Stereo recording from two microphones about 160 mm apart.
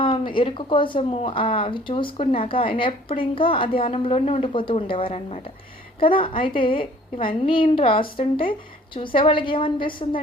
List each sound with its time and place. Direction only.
0.0 s speech: 30° left (ahead or behind)